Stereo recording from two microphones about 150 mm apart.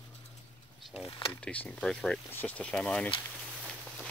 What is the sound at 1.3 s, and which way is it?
Speech, 10° left (ahead or behind).